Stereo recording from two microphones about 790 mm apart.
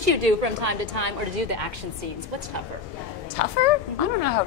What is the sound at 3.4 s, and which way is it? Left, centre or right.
Speech, left.